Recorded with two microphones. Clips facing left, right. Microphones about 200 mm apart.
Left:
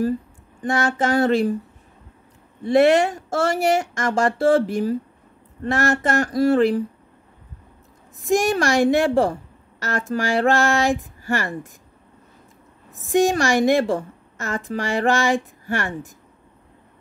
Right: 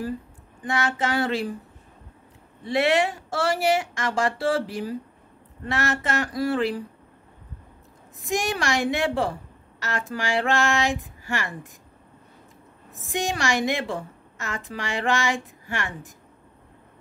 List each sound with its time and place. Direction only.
0.6 s a woman's voice: 45° left (ahead or behind)
2.6 s a woman's voice: 45° left (ahead or behind)
8.2 s a woman's voice: 45° left (ahead or behind)
13.0 s a woman's voice: 45° left (ahead or behind)